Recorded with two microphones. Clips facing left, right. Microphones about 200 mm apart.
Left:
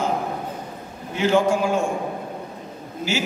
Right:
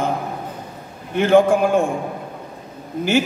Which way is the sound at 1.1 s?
55° right (ahead or behind).